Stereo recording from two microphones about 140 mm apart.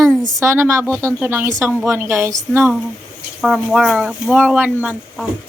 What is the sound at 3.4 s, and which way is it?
Speech, 5° right (ahead or behind).